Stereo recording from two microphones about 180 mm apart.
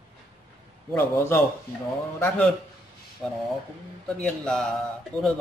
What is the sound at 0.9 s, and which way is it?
A man's voice, 15° left (ahead or behind).